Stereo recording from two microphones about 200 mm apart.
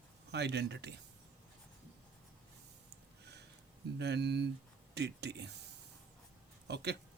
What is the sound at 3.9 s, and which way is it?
Speech, 55° right (ahead or behind).